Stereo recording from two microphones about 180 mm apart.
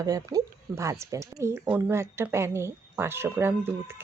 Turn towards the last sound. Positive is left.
turn(degrees=-10)  # may be behind; listen again after turning